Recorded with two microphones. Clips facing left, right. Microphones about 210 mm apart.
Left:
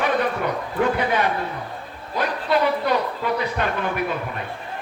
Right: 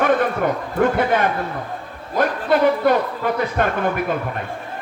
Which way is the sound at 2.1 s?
50° right (ahead or behind).